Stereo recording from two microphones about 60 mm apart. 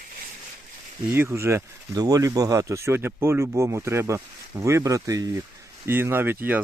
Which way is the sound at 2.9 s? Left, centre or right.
Right.